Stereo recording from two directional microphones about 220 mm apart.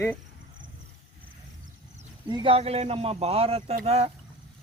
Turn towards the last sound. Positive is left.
turn(degrees=-30)  # may be behind; listen again after turning